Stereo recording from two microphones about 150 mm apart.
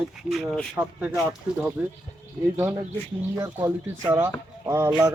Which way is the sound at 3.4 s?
20° right (ahead or behind).